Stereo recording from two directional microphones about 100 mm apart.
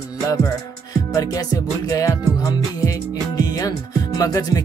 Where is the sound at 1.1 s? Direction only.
35° left (ahead or behind).